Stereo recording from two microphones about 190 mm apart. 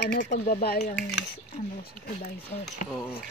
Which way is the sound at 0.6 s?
55° left (ahead or behind).